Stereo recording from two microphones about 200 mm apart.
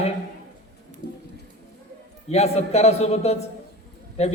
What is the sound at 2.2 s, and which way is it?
A man's voice, 30° left (ahead or behind).